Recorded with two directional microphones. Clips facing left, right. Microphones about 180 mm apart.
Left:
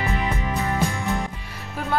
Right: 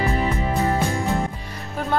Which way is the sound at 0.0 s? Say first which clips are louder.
Right 3 dB; 35° right (ahead or behind).